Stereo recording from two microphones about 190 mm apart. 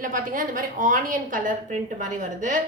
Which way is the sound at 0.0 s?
45° right (ahead or behind).